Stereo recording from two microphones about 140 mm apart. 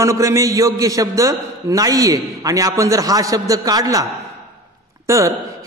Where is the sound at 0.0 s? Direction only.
20° right (ahead or behind).